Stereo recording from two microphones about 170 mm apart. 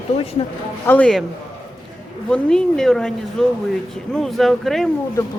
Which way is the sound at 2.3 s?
5° left (ahead or behind).